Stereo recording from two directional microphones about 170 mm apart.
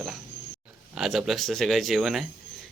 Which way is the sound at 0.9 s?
Centre (ahead or behind).